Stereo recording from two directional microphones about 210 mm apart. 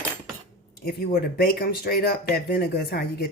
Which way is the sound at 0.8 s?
50° left (ahead or behind).